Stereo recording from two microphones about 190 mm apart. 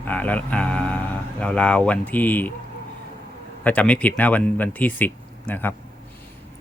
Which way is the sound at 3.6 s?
5° left (ahead or behind).